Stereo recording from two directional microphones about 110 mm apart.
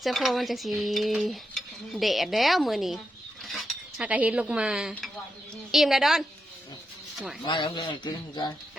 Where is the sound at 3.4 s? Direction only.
Centre (ahead or behind).